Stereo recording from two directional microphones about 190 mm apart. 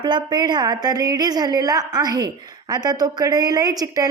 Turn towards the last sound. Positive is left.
turn(degrees=-20)  # may be behind; listen again after turning